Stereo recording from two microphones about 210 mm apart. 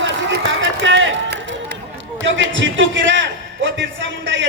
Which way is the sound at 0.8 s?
60° right (ahead or behind).